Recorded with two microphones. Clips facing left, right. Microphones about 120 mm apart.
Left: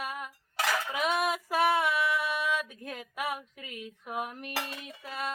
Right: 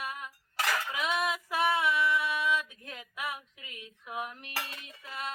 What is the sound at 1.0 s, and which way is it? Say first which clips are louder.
Female singing: left 3 dB; 40° left (ahead or behind).